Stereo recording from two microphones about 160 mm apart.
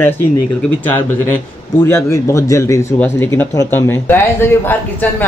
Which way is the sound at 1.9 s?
20° left (ahead or behind).